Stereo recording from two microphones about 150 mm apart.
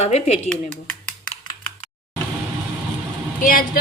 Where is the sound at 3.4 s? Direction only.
65° left (ahead or behind).